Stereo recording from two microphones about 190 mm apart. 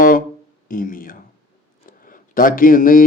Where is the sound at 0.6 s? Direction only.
45° left (ahead or behind).